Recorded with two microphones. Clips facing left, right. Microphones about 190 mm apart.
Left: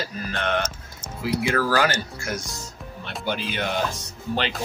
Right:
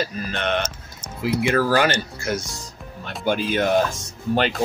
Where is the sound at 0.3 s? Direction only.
20° right (ahead or behind).